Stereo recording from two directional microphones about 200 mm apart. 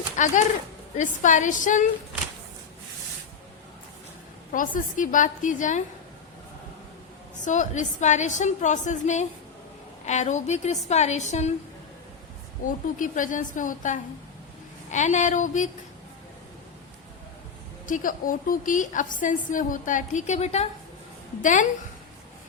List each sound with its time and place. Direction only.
0.2 s a woman's voice: 40° left (ahead or behind)
4.5 s a woman's voice: 40° left (ahead or behind)
7.4 s a woman's voice: 40° left (ahead or behind)
12.6 s a woman's voice: 40° left (ahead or behind)
17.8 s a woman's voice: 40° left (ahead or behind)